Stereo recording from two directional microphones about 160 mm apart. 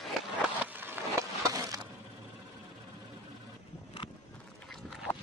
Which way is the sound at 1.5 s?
20° right (ahead or behind).